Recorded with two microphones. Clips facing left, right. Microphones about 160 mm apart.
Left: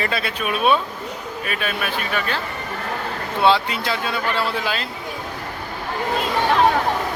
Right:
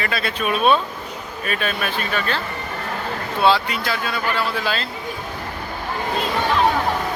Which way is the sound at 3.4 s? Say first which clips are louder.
Even; 20° left (ahead or behind).